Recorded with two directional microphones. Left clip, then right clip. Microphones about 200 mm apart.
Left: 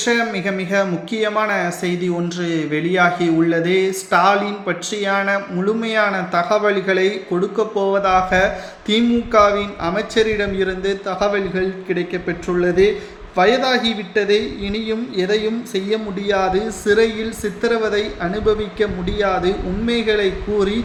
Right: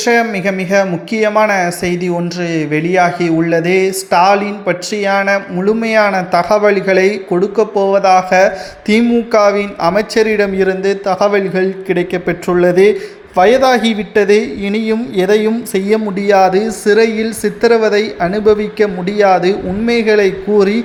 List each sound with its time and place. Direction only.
0.0 s speech: 30° right (ahead or behind)